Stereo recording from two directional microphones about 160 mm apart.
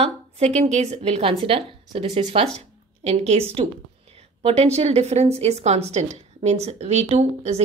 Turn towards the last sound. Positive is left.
turn(degrees=-40)  # may be behind; listen again after turning